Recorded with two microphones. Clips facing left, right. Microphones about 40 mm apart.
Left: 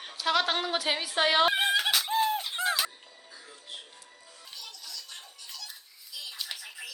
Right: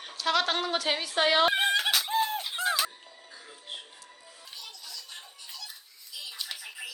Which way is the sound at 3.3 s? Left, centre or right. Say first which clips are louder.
Right 2 dB; centre.